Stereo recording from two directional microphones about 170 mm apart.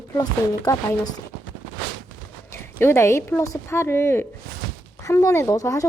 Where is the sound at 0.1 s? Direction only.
20° left (ahead or behind).